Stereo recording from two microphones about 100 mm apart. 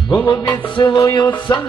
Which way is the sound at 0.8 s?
35° left (ahead or behind).